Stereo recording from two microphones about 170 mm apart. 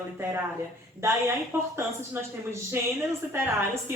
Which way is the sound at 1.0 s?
15° right (ahead or behind).